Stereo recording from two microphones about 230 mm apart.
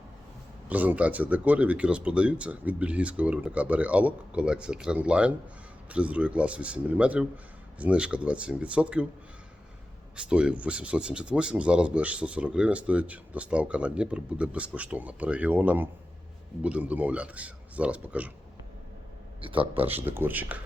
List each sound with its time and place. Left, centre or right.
0.7 s speech: centre
10.2 s speech: centre
19.4 s speech: right
19.7 s speech: centre